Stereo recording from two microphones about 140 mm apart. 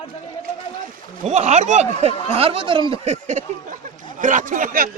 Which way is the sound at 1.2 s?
55° right (ahead or behind).